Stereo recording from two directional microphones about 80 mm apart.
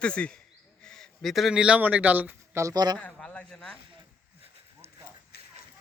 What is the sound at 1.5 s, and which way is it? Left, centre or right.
Speech, centre.